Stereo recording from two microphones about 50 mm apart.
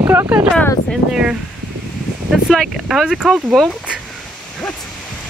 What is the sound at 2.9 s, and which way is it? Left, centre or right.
Speech, centre.